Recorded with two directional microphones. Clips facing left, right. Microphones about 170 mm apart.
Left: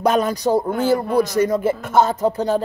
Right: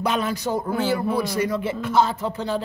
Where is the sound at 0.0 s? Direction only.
45° left (ahead or behind).